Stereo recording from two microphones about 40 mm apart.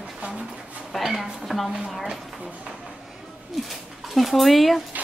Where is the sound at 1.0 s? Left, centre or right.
Centre.